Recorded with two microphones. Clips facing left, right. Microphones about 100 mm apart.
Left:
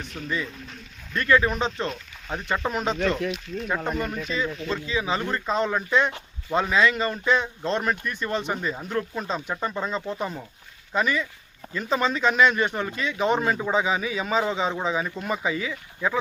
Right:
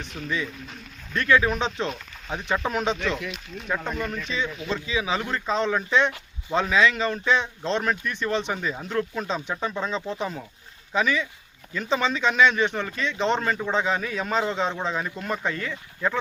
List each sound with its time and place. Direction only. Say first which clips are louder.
0.0 s speech: even; centre (ahead or behind)
3.0 s speech: left 4 dB; 40° left (ahead or behind)
3.3 s speech: left 2 dB; 5° left (ahead or behind)